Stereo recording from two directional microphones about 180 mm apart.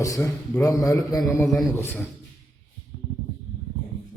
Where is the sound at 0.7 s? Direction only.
20° left (ahead or behind).